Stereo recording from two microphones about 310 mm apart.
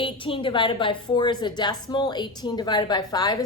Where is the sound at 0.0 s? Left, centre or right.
Centre.